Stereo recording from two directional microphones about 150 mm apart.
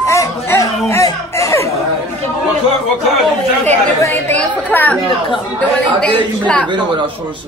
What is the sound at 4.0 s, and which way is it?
Chatter, 15° left (ahead or behind).